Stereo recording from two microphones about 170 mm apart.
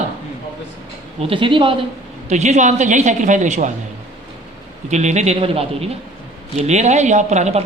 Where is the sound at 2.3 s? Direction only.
45° right (ahead or behind).